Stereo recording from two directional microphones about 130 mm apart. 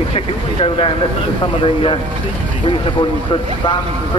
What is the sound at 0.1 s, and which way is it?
Speech, 45° left (ahead or behind).